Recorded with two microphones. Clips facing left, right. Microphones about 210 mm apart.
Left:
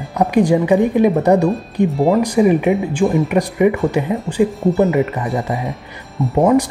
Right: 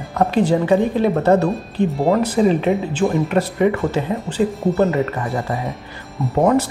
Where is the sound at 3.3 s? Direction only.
15° left (ahead or behind).